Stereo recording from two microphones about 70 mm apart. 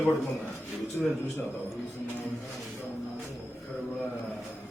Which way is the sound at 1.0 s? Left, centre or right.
Left.